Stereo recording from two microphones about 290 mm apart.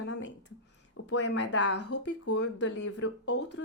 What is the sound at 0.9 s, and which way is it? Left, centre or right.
Speech, left.